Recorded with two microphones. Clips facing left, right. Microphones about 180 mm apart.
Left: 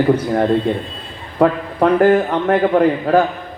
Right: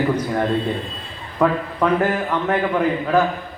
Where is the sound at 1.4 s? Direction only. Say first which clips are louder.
Left 4 dB; 45° left (ahead or behind).